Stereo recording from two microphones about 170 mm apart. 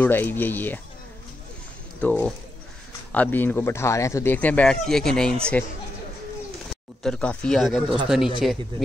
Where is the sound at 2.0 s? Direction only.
5° left (ahead or behind).